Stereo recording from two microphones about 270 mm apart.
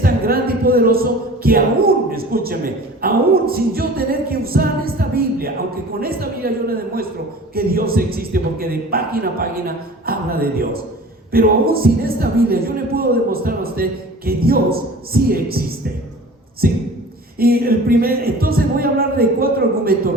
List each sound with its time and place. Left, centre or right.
0.0 s music: right
6.0 s a sound: right
7.5 s a man's voice: right
16.6 s a man's voice: right